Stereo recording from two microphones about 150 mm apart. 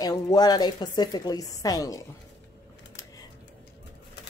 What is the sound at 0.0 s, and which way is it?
A woman's voice, 25° left (ahead or behind).